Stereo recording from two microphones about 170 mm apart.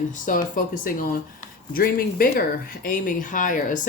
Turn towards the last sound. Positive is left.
turn(degrees=50)  # may be behind; listen again after turning